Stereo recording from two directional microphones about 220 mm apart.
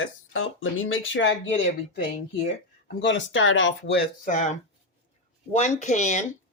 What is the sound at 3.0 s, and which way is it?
Speech, 55° left (ahead or behind).